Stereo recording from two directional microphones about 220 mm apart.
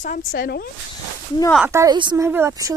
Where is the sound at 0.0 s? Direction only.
40° left (ahead or behind).